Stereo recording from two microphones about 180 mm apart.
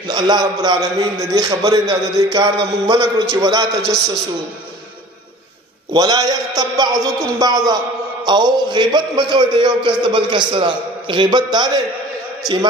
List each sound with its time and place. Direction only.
0.1 s a man's voice: 25° right (ahead or behind)
5.9 s a man's voice: 20° right (ahead or behind)